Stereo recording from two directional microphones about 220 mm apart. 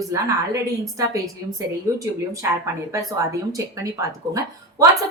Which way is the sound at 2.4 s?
10° right (ahead or behind).